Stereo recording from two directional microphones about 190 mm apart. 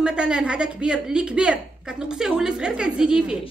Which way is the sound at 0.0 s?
5° right (ahead or behind).